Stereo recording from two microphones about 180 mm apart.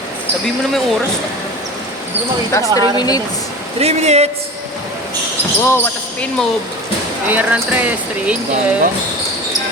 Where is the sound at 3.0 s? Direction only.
20° left (ahead or behind).